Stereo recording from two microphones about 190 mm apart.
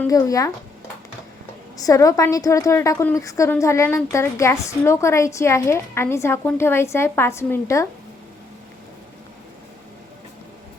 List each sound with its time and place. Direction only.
0.1 s a woman's voice: 20° left (ahead or behind)
1.8 s a woman's voice: 15° left (ahead or behind)